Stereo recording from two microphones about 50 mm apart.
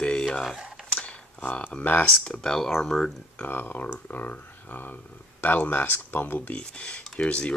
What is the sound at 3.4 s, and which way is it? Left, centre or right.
Speech, left.